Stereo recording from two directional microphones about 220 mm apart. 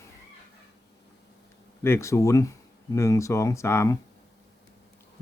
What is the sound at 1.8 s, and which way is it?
Speech, 10° left (ahead or behind).